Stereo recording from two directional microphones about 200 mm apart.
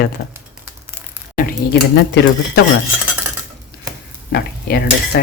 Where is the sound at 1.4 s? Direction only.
50° left (ahead or behind).